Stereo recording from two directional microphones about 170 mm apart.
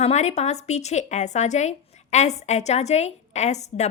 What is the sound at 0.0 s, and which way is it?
A woman's voice, 40° left (ahead or behind).